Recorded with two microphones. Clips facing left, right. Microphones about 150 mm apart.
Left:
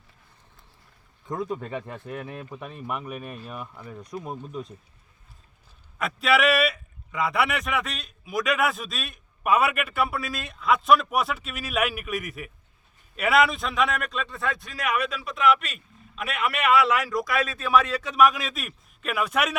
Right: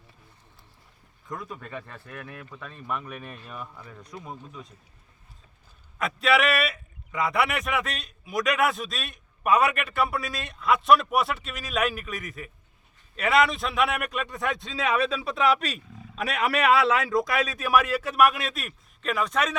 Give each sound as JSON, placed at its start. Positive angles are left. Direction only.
{"t": 1.3, "sound": "speech", "side_deg": 25}
{"t": 6.0, "sound": "a man's voice", "side_deg": 0}